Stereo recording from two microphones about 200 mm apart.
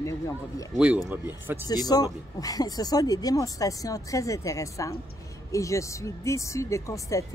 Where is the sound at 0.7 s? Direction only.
5° right (ahead or behind).